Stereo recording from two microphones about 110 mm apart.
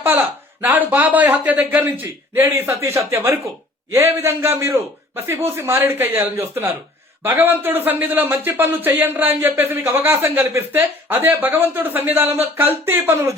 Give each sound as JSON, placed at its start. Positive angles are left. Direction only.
{"t": 0.0, "sound": "a man's voice", "side_deg": -20}